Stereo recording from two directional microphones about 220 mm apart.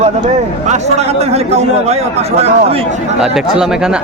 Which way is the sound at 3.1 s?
Centre (ahead or behind).